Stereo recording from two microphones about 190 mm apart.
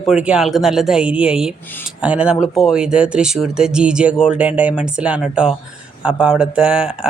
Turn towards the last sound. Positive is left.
turn(degrees=-5)  # may be behind; listen again after turning